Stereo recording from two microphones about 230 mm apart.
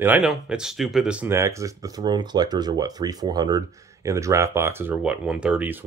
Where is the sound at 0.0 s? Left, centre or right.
Centre.